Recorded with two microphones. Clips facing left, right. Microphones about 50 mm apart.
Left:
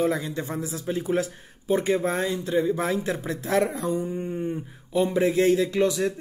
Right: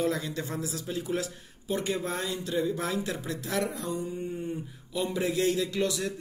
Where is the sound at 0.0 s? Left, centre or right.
Left.